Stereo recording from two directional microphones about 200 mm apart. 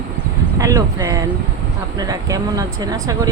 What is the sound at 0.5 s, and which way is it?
Speech, 20° right (ahead or behind).